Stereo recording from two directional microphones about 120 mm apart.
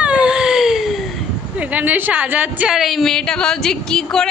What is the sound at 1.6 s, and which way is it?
A woman's voice, 10° right (ahead or behind).